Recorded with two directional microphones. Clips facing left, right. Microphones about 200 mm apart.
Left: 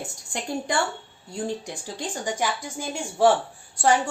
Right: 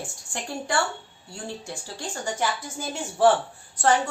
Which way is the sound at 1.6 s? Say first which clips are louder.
Left 2 dB; 20° left (ahead or behind).